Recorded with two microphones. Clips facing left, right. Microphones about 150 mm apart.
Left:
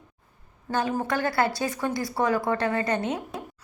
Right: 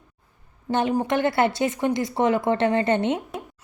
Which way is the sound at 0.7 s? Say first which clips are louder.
Right 4 dB; 25° right (ahead or behind).